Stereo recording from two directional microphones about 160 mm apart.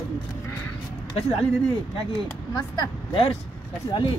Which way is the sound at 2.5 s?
25° left (ahead or behind).